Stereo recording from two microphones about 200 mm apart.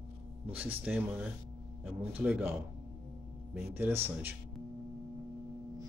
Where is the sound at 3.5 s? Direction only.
10° right (ahead or behind).